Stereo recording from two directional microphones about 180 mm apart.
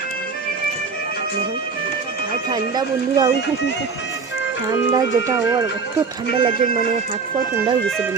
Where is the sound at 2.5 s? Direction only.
25° right (ahead or behind).